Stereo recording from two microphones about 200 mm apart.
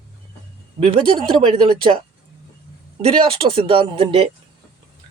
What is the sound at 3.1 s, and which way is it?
Speech, 30° right (ahead or behind).